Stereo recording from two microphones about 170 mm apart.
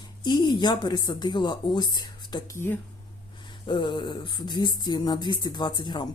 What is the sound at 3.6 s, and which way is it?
Speech, 25° left (ahead or behind).